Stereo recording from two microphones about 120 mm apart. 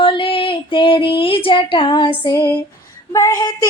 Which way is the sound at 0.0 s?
45° left (ahead or behind).